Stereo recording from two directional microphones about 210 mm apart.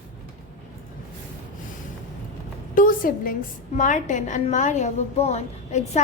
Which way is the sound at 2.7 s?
40° left (ahead or behind).